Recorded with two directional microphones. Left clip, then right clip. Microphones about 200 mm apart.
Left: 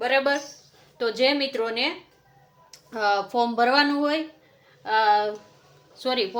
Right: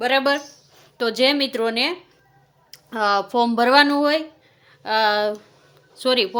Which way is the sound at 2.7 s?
35° right (ahead or behind).